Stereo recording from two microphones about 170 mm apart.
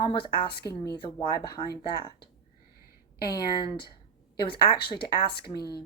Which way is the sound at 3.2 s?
25° left (ahead or behind).